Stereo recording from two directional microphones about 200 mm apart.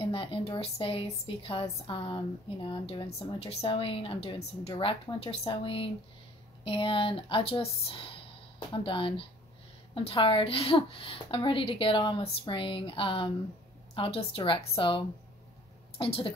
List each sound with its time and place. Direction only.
0.0 s a woman's voice: 30° left (ahead or behind)